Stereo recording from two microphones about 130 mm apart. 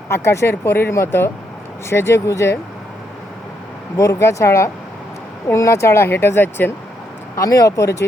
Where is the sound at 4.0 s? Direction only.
20° left (ahead or behind).